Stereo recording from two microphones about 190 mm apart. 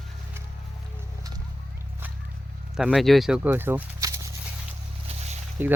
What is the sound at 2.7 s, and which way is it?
Speech, centre (ahead or behind).